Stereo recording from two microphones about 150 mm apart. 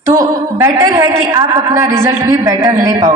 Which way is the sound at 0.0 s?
20° right (ahead or behind).